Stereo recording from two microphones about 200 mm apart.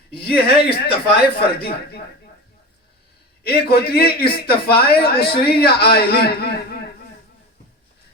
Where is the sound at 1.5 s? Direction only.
50° left (ahead or behind).